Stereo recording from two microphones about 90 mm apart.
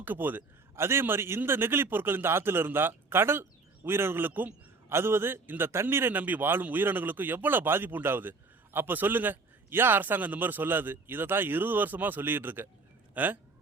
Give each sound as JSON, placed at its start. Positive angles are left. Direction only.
{"t": 0.0, "sound": "a man's voice", "side_deg": -20}